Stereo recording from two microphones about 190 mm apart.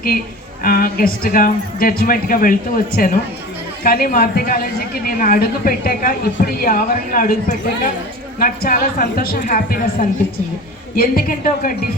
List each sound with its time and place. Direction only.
0.6 s a woman's voice: 50° left (ahead or behind)